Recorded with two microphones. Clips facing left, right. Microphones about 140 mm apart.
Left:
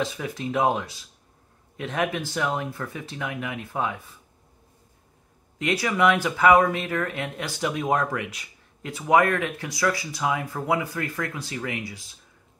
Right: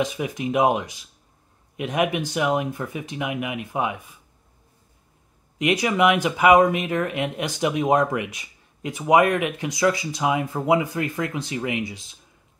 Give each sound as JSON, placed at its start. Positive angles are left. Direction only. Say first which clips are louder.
{"t": 0.0, "sound": "speech", "louder": "right 4 dB", "side_deg": -15}
{"t": 5.6, "sound": "speech", "louder": "right 3 dB", "side_deg": -15}